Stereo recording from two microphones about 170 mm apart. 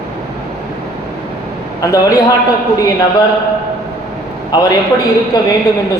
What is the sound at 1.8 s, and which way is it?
Speech, 20° left (ahead or behind).